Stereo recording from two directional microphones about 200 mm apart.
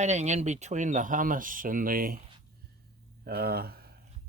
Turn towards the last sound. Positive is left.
turn(degrees=-50)  # may be behind; listen again after turning